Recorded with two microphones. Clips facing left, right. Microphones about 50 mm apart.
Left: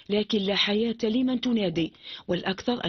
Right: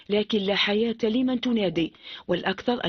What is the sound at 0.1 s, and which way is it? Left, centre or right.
Speech, centre.